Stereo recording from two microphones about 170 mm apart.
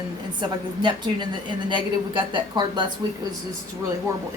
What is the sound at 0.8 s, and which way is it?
A woman's voice, 25° right (ahead or behind).